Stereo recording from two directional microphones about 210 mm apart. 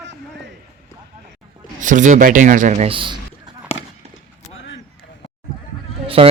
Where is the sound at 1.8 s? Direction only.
35° right (ahead or behind).